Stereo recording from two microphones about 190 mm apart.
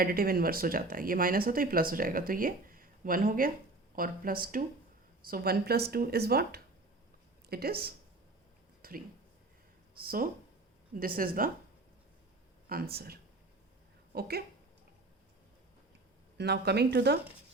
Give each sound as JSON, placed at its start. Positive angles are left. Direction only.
{"t": 0.0, "sound": "speech", "side_deg": -50}
{"t": 8.8, "sound": "a sound", "side_deg": -50}
{"t": 10.0, "sound": "speech", "side_deg": -50}
{"t": 12.6, "sound": "speech", "side_deg": -50}
{"t": 16.4, "sound": "speech", "side_deg": -60}